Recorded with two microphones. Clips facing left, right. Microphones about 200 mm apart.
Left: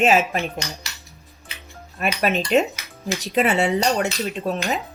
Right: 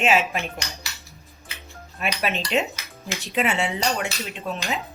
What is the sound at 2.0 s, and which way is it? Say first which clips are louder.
Speech: left 5 dB; 40° left (ahead or behind).